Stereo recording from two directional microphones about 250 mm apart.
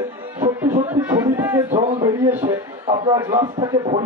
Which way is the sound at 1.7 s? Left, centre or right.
Right.